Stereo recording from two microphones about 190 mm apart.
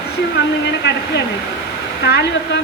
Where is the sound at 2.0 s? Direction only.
60° left (ahead or behind).